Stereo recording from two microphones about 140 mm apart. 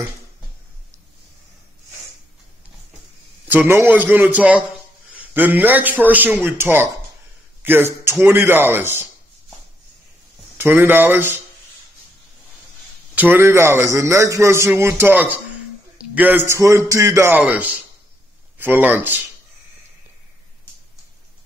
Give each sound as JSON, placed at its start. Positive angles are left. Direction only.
{"t": 3.4, "sound": "a man's voice", "side_deg": -15}
{"t": 10.6, "sound": "a man's voice", "side_deg": -15}
{"t": 13.1, "sound": "a man's voice", "side_deg": -15}